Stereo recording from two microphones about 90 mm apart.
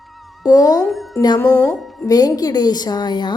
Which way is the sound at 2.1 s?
45° left (ahead or behind).